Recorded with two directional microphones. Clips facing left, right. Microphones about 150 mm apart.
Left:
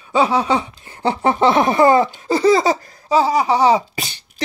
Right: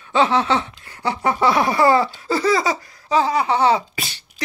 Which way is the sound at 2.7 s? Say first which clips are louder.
Left 5 dB; 45° left (ahead or behind).